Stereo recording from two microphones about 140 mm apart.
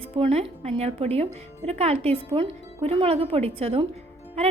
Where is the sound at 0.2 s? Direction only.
45° right (ahead or behind).